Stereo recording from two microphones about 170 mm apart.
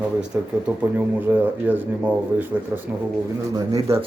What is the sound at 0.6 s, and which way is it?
Speech, 10° right (ahead or behind).